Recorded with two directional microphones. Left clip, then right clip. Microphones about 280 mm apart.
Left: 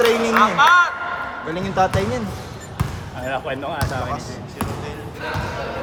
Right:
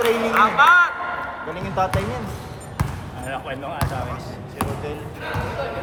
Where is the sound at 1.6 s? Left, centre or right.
Left.